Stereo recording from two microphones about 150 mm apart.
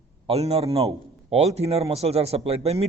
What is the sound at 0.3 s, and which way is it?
A man's voice, 45° right (ahead or behind).